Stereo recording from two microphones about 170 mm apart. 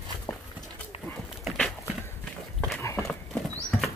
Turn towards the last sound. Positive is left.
turn(degrees=15)  # may be behind; listen again after turning